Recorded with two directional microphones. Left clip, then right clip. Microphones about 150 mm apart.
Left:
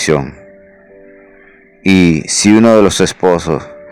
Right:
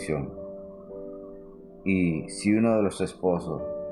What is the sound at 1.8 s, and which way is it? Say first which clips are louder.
Speech: left 16 dB; 60° left (ahead or behind).